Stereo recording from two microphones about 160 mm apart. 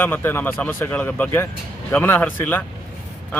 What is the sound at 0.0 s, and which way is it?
A man's voice, 10° left (ahead or behind).